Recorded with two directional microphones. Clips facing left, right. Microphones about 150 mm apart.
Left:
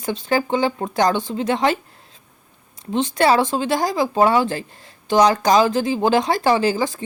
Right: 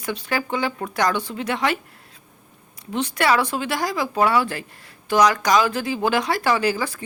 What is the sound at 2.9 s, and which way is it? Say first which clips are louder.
Speech: left 4 dB; 25° left (ahead or behind).